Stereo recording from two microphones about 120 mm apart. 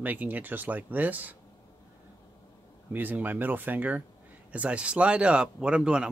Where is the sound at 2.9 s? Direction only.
15° right (ahead or behind).